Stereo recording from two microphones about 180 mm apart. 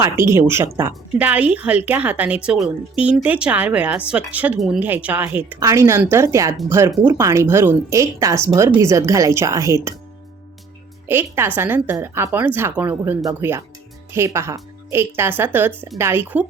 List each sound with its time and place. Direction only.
0.0 s a woman's voice: 15° right (ahead or behind)
11.1 s a woman's voice: 10° right (ahead or behind)